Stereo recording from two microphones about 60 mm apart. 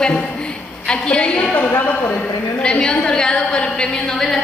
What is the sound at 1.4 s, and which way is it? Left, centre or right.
A woman's voice, centre.